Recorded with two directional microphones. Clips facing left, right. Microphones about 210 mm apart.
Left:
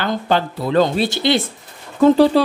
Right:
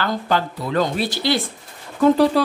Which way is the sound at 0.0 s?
25° left (ahead or behind).